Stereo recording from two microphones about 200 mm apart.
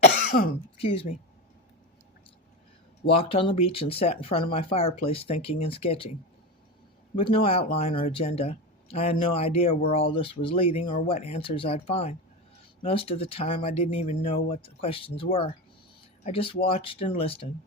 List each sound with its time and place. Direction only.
0.3 s speech: 45° left (ahead or behind)
0.8 s speech: 30° left (ahead or behind)
3.2 s speech: 25° left (ahead or behind)
7.2 s speech: 30° left (ahead or behind)